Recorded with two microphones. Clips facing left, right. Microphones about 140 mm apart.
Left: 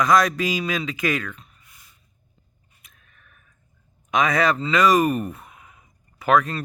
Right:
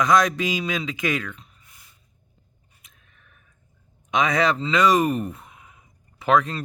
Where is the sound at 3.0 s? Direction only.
25° right (ahead or behind).